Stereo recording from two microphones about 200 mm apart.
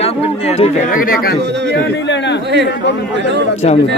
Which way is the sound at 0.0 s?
30° left (ahead or behind).